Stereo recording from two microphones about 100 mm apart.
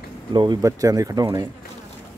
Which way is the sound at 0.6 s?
35° right (ahead or behind).